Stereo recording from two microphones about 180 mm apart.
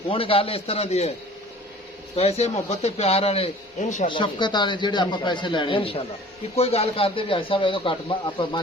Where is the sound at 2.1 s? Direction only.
35° left (ahead or behind).